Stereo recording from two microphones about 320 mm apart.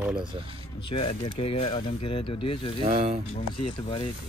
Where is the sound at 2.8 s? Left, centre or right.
Right.